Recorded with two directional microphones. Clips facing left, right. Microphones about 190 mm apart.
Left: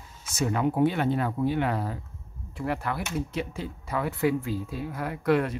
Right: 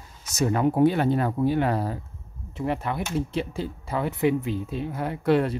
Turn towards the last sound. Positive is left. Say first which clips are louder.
# right 2 dB
turn(degrees=-30)  # may be behind; listen again after turning